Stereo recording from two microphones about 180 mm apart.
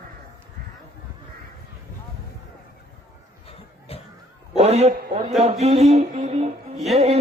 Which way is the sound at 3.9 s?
35° left (ahead or behind).